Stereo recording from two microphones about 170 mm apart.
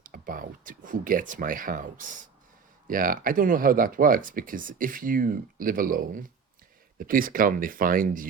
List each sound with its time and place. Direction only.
0.0 s speech: 55° right (ahead or behind)